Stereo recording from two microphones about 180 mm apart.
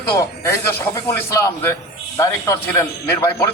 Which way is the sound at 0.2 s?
15° left (ahead or behind).